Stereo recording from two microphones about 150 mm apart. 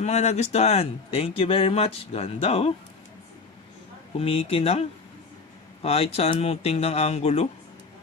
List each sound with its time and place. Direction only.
0.0 s speech: 50° left (ahead or behind)
4.2 s speech: 40° left (ahead or behind)